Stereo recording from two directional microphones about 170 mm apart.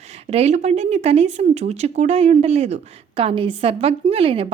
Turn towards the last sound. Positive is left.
turn(degrees=-35)  # may be behind; listen again after turning